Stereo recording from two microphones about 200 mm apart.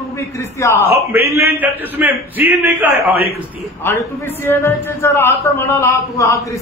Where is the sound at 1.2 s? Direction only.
50° left (ahead or behind).